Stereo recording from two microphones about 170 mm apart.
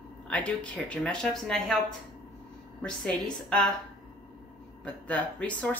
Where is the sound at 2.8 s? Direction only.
5° left (ahead or behind).